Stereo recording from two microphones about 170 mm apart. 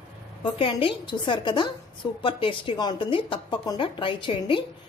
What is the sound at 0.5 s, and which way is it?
Speech, 30° left (ahead or behind).